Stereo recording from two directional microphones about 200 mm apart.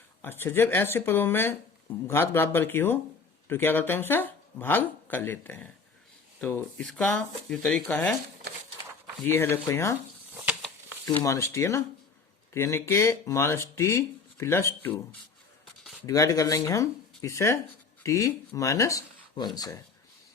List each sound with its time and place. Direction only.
0.2 s speech: 10° left (ahead or behind)
9.2 s speech: 10° left (ahead or behind)
11.0 s speech: 15° left (ahead or behind)
16.0 s speech: 15° left (ahead or behind)